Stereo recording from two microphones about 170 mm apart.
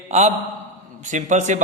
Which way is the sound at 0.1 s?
40° right (ahead or behind).